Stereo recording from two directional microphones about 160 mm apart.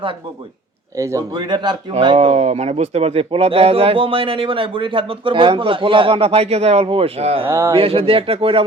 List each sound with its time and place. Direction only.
0.9 s a man's voice: 20° right (ahead or behind)
2.1 s a man's voice: 45° right (ahead or behind)
7.4 s speech: 15° right (ahead or behind)
7.8 s a man's voice: 35° right (ahead or behind)